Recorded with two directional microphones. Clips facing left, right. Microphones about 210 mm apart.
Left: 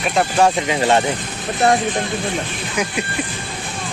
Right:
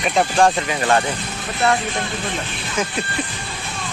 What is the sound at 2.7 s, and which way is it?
Music, 15° left (ahead or behind).